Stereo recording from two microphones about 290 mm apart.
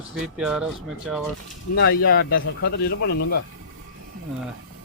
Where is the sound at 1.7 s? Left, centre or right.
Left.